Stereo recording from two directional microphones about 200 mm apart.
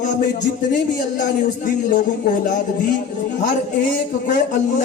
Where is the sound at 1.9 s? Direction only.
45° left (ahead or behind).